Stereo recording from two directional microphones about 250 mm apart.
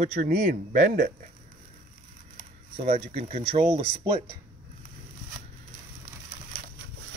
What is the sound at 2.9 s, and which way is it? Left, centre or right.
Speech, right.